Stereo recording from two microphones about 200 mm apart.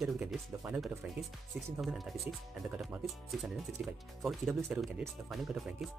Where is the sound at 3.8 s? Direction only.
5° right (ahead or behind).